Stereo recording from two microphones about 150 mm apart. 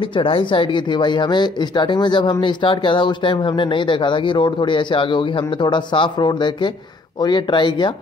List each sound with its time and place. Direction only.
0.1 s speech: 35° left (ahead or behind)